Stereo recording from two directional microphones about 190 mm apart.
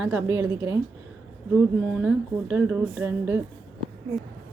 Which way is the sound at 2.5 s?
10° right (ahead or behind).